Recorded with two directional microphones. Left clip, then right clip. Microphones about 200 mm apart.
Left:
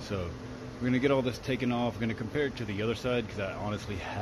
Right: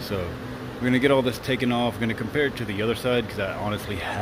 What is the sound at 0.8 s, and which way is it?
Speech, 5° left (ahead or behind).